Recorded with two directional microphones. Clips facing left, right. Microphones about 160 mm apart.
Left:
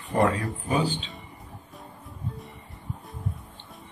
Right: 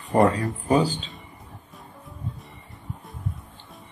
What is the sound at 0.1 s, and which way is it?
Speech, 40° right (ahead or behind).